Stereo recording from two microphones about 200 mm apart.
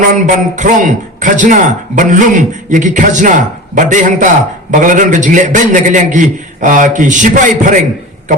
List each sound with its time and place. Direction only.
0.1 s a man's voice: 40° right (ahead or behind)